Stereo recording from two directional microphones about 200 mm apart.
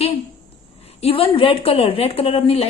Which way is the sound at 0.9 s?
30° left (ahead or behind).